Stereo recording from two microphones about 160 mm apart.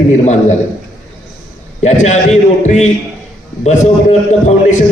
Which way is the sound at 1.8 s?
45° left (ahead or behind).